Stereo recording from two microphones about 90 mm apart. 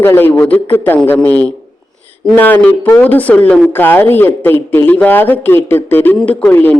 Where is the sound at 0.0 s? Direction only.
25° left (ahead or behind).